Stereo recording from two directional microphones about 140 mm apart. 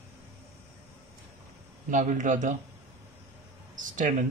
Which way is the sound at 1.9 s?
65° right (ahead or behind).